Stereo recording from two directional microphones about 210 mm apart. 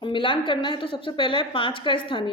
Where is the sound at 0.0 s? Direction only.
25° left (ahead or behind).